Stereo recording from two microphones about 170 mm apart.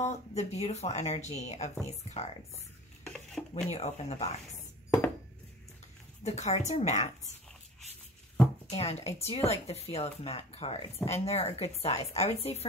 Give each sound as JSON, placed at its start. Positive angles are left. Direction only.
{"t": 0.0, "sound": "speech", "side_deg": 40}
{"t": 3.1, "sound": "stir", "side_deg": 5}
{"t": 3.7, "sound": "speech", "side_deg": 40}
{"t": 6.2, "sound": "speech", "side_deg": 40}
{"t": 8.6, "sound": "speech", "side_deg": 40}